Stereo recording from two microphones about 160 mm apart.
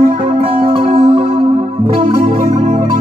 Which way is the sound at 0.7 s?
35° right (ahead or behind).